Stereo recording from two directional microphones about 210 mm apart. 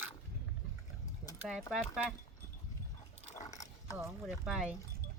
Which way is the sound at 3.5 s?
15° left (ahead or behind).